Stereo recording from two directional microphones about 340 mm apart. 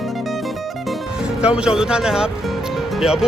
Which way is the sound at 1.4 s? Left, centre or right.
Centre.